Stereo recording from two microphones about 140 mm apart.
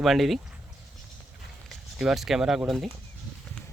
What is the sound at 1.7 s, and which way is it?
Speech, centre (ahead or behind).